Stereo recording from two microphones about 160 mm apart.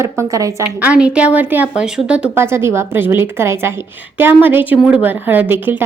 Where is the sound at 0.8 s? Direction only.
5° right (ahead or behind).